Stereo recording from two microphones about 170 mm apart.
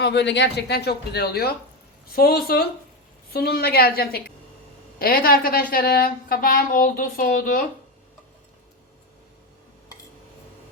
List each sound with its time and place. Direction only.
0.0 s a woman's voice: 90° left; by 7.6 s 55° left (ahead or behind)